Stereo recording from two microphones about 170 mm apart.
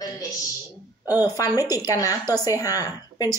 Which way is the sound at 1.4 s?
20° left (ahead or behind).